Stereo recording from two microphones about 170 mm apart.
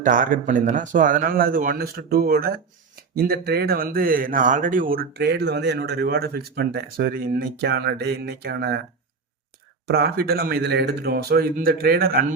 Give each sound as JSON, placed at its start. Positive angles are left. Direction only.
{"t": 0.0, "sound": "speech", "side_deg": -50}
{"t": 9.8, "sound": "speech", "side_deg": -70}